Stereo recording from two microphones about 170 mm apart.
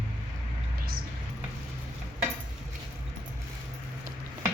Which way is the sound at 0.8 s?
60° right (ahead or behind).